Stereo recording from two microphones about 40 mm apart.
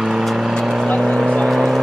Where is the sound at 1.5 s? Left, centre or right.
Centre.